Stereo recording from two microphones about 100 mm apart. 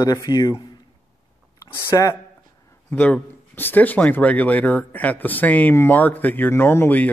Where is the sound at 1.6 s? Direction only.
35° left (ahead or behind).